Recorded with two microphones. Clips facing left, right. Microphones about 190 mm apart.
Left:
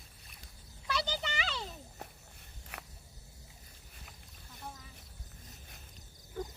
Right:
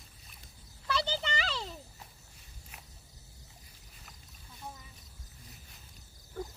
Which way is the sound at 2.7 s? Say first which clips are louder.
Left 7 dB; 70° left (ahead or behind).